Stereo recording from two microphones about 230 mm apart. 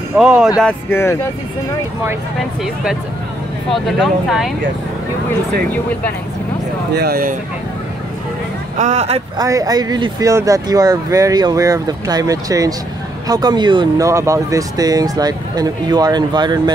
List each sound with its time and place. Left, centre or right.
0.2 s speech: centre
2.6 s speech: centre
7.0 s speech: right
8.7 s speech: right
9.4 s speech: centre